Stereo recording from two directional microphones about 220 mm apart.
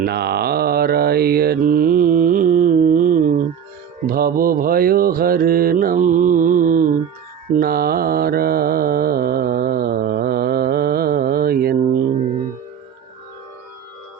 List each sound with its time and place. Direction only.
0.0 s mantra: 50° right (ahead or behind)